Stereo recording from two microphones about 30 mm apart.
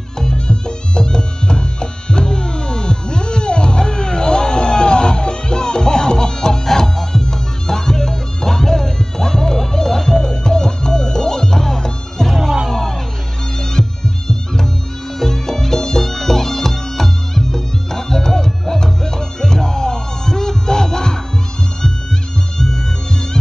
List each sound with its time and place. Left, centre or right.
0.2 s music: left